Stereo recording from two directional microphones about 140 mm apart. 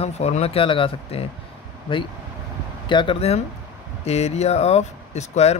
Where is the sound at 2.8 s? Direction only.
35° left (ahead or behind).